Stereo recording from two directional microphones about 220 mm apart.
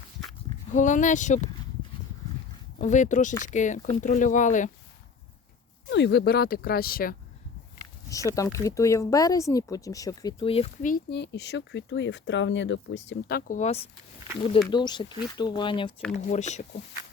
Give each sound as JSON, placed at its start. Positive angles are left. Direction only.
{"t": 0.7, "sound": "speech", "side_deg": 35}
{"t": 2.8, "sound": "speech", "side_deg": 35}
{"t": 5.9, "sound": "speech", "side_deg": 50}
{"t": 8.4, "sound": "speech", "side_deg": 15}
{"t": 10.9, "sound": "speech", "side_deg": 50}
{"t": 14.7, "sound": "speech", "side_deg": 20}
{"t": 16.1, "sound": "speech", "side_deg": 35}